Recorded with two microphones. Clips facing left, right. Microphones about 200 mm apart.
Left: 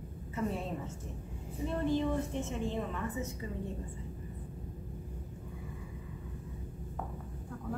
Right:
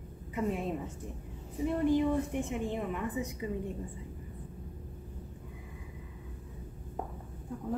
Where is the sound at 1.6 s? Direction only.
15° right (ahead or behind).